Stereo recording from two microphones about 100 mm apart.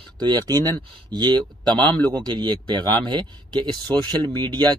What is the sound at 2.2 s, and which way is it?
Speech, 50° right (ahead or behind).